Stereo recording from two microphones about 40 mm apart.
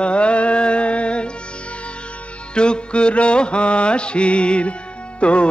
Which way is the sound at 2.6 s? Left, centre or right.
Left.